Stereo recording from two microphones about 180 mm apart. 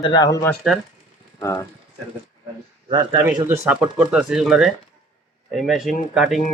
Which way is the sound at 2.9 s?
25° right (ahead or behind).